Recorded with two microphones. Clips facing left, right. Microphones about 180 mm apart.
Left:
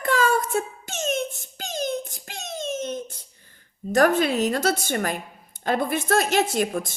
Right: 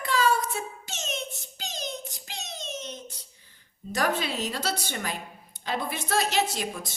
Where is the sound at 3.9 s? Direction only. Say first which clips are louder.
Left 9 dB; 50° left (ahead or behind).